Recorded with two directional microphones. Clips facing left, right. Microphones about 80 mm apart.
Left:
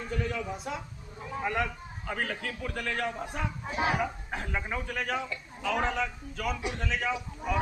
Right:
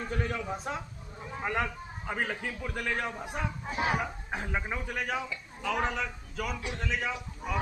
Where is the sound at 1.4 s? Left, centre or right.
Right.